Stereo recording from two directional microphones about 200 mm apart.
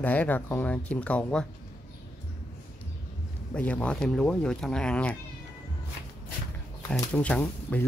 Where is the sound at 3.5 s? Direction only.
5° left (ahead or behind).